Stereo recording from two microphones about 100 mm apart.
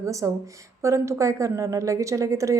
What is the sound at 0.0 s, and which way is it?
A woman's voice, 30° right (ahead or behind).